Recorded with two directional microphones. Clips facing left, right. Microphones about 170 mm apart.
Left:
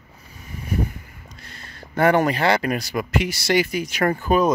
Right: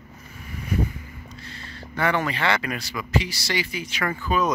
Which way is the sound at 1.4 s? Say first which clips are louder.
Right 3 dB; 45° left (ahead or behind).